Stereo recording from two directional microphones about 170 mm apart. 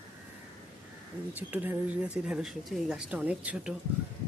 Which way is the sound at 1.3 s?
10° right (ahead or behind).